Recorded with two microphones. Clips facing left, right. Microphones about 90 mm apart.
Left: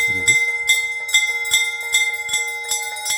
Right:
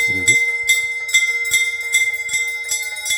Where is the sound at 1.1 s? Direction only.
55° left (ahead or behind).